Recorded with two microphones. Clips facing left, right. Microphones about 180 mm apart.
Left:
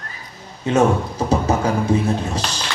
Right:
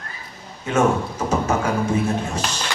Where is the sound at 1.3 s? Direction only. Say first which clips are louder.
Left 2 dB; 35° left (ahead or behind).